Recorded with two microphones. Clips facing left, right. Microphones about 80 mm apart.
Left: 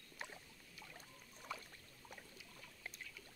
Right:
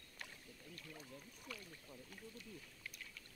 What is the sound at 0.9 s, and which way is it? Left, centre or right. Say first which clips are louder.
Speech: right 4 dB; left.